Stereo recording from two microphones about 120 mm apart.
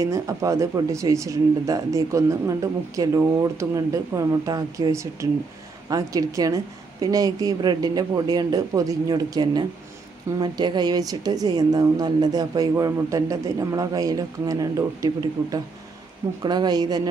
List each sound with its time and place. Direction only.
0.0 s speech: 25° right (ahead or behind)